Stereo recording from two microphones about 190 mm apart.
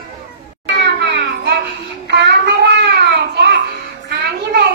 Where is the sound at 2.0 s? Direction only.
60° right (ahead or behind).